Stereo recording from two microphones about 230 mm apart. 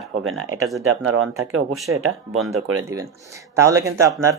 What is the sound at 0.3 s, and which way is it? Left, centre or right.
Speech, right.